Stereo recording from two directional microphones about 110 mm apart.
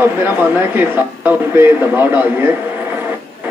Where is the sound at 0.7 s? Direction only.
15° right (ahead or behind).